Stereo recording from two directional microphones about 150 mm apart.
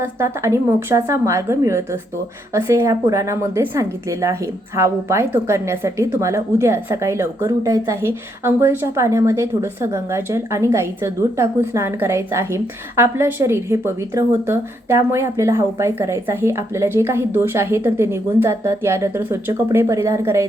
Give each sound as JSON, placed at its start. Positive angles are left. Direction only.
{"t": 0.0, "sound": "a woman's voice", "side_deg": -20}